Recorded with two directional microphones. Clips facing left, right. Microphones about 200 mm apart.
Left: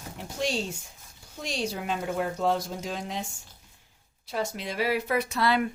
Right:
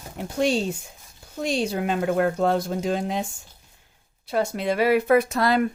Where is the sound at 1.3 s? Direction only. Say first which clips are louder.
Right 7 dB; 60° right (ahead or behind).